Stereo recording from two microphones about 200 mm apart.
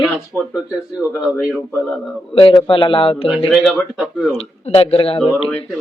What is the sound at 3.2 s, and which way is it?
Speech, centre (ahead or behind).